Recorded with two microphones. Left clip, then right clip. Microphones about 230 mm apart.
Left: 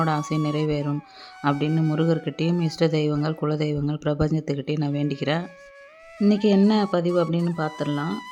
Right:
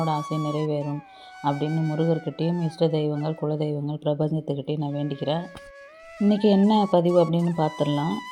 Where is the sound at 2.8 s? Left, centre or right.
Left.